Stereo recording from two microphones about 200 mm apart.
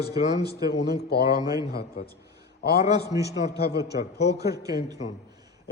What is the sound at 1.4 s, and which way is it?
Speech, 20° right (ahead or behind).